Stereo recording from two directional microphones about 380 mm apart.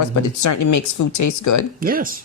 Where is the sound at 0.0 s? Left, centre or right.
Left.